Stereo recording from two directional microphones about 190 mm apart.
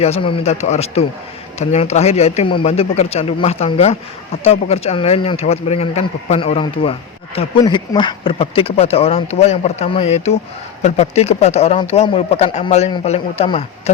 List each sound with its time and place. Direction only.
0.0 s speech: 30° left (ahead or behind)